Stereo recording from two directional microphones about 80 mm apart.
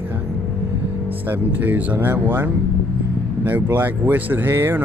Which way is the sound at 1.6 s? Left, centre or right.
Right.